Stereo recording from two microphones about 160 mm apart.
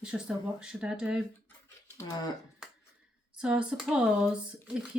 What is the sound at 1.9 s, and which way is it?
Speech, 20° left (ahead or behind).